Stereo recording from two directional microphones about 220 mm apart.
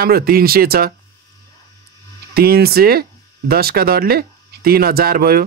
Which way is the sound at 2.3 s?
45° right (ahead or behind).